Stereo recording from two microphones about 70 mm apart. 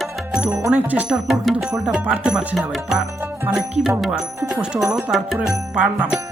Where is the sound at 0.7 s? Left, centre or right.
Right.